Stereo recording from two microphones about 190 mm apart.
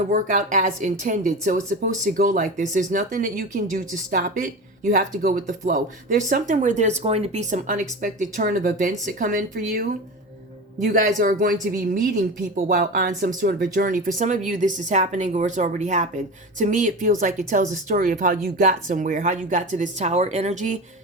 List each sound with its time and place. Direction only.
0.1 s speech: 45° right (ahead or behind)